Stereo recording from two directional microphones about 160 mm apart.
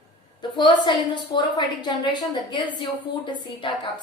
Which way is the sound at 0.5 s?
30° left (ahead or behind).